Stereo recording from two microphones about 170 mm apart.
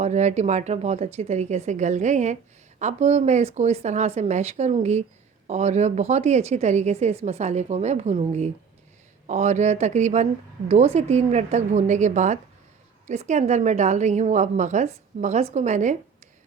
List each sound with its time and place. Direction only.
0.0 s a woman's voice: 40° right (ahead or behind)